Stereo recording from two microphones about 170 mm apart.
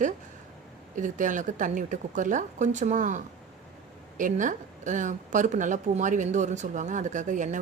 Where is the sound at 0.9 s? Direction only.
50° right (ahead or behind).